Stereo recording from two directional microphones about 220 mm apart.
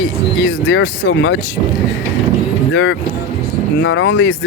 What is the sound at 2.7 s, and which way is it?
Speech, 60° left (ahead or behind).